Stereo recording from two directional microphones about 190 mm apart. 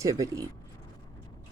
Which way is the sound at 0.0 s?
15° right (ahead or behind).